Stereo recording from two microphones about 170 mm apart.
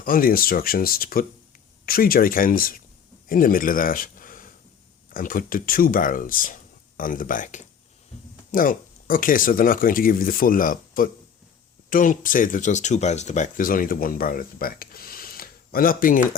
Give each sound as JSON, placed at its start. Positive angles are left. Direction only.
{"t": 0.0, "sound": "a man's voice", "side_deg": 60}